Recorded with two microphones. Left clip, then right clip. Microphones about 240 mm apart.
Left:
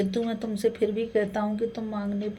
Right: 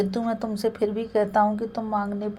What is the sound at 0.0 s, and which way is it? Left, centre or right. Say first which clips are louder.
A woman's voice: right 2 dB; right.